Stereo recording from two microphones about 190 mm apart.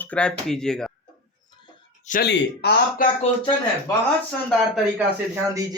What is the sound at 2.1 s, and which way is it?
Speech, 55° left (ahead or behind).